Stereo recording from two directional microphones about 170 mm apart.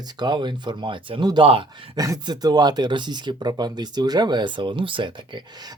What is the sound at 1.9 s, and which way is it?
Speech, 20° right (ahead or behind).